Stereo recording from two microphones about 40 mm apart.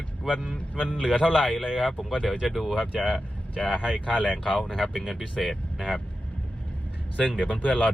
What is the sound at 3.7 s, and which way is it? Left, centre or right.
Speech, right.